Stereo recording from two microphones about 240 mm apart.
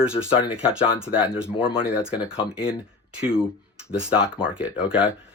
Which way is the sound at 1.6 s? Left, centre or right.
Left.